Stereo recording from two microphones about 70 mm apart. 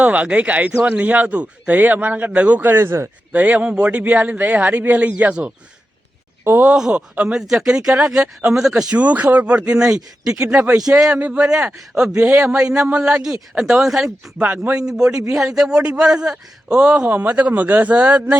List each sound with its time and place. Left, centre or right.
0.0 s speech: centre; by 3.1 s right
3.3 s speech: right
6.7 s a man's voice: centre
14.3 s a man's voice: right